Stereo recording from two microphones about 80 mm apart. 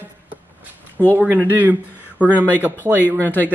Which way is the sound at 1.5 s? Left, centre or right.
Right.